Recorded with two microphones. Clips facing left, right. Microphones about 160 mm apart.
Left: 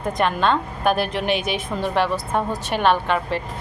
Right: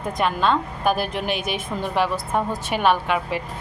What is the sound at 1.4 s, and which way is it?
Speech, 50° right (ahead or behind).